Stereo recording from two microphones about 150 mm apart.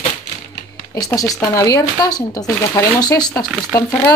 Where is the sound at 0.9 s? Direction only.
25° left (ahead or behind).